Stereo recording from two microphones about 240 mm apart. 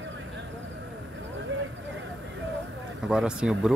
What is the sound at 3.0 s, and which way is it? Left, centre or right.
Speech, centre.